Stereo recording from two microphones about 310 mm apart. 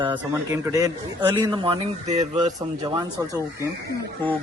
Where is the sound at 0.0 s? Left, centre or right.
Centre.